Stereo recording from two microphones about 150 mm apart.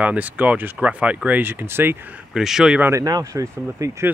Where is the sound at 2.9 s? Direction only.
20° right (ahead or behind).